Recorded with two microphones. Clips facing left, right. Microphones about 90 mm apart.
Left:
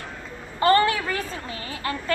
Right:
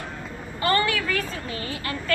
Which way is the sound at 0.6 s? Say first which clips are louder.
Left 4 dB; 30° left (ahead or behind).